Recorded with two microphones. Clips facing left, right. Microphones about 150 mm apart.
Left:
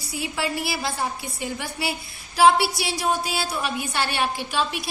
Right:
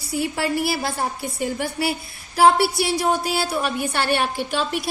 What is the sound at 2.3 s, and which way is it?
A woman's voice, 50° right (ahead or behind).